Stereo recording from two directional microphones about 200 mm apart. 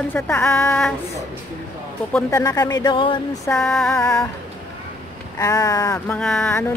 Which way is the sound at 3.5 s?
Centre (ahead or behind).